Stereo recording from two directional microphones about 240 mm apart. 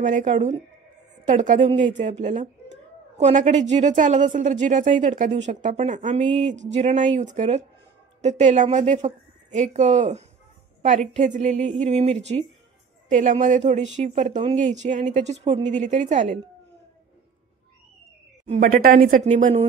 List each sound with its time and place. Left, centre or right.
0.0 s a woman's voice: right
18.4 s speech: right